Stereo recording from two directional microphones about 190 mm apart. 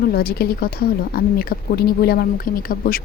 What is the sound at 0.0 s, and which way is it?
Speech, 55° left (ahead or behind).